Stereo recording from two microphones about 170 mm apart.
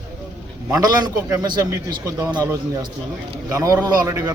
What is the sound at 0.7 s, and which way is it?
A man's voice, 20° right (ahead or behind).